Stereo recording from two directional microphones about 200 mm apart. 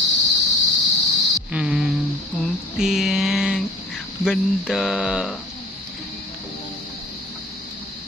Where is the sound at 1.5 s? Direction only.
5° right (ahead or behind).